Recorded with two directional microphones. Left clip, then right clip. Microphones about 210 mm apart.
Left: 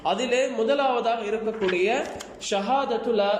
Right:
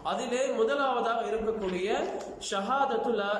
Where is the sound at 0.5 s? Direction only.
20° left (ahead or behind).